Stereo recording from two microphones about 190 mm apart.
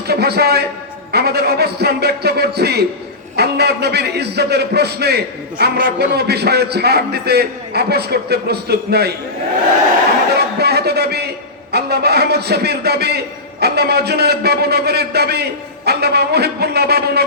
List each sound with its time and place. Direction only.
0.1 s a man's voice: 60° right (ahead or behind)
10.3 s a sound: 60° right (ahead or behind)
11.7 s a man's voice: 60° right (ahead or behind)